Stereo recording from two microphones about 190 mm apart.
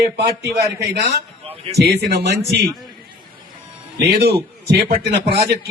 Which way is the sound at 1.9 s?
60° right (ahead or behind).